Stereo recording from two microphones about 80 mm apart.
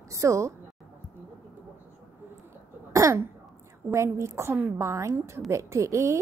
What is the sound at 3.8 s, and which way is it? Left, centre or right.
A woman's voice, right.